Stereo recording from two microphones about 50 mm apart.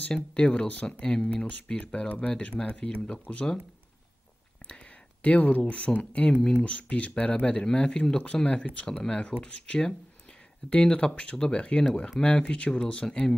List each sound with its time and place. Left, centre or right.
0.1 s speech: left
5.2 s speech: left
5.6 s speech: centre